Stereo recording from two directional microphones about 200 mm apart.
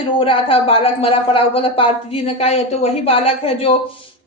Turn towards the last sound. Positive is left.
turn(degrees=30)  # may be behind; listen again after turning